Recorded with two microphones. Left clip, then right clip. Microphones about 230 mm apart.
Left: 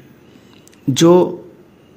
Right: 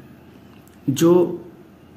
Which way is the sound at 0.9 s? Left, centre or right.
Left.